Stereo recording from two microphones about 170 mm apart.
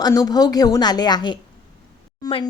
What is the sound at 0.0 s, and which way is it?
A woman's voice, 20° left (ahead or behind).